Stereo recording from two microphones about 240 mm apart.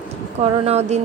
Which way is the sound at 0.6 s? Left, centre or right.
Right.